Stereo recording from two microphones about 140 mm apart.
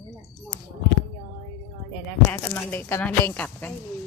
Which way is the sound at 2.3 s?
15° left (ahead or behind).